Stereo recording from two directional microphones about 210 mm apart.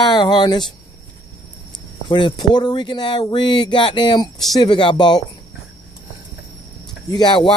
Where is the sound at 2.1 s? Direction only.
20° left (ahead or behind).